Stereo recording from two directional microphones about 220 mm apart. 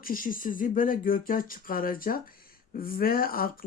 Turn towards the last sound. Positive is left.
turn(degrees=40)  # may be behind; listen again after turning